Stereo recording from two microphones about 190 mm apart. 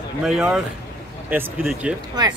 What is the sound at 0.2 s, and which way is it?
A man's voice, 5° right (ahead or behind).